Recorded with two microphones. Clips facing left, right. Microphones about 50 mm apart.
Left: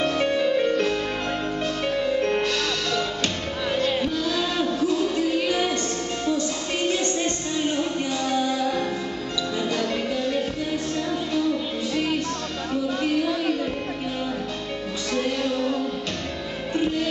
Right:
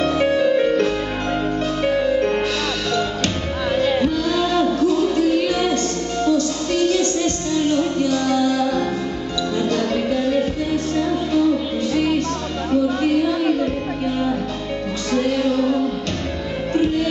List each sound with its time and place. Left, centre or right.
0.0 s music: centre
3.7 s music: centre
5.5 s music: centre
9.6 s music: centre
12.8 s a sound: centre
15.1 s music: centre